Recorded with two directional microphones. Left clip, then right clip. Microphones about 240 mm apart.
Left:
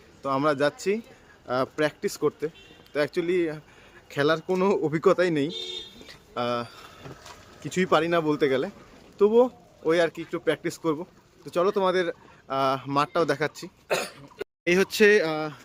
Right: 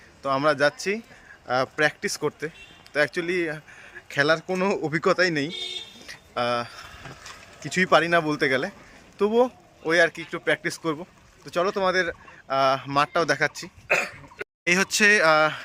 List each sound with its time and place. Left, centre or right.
0.2 s a man's voice: centre
6.1 s a sound: centre
7.6 s a man's voice: centre
13.8 s speech: centre
15.4 s speech: right